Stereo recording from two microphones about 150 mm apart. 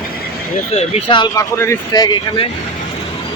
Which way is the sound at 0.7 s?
40° left (ahead or behind).